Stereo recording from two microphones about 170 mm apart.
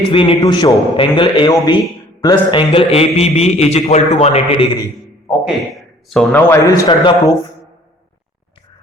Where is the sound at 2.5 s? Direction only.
30° left (ahead or behind).